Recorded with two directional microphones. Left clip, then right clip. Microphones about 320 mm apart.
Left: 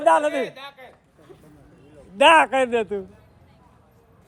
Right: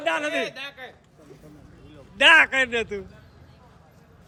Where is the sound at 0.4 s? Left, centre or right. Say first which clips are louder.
Right 1 dB; centre.